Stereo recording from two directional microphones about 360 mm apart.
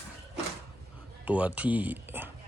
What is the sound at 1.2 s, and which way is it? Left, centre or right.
Speech, centre.